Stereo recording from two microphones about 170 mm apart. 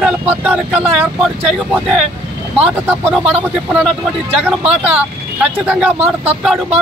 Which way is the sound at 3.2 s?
5° right (ahead or behind).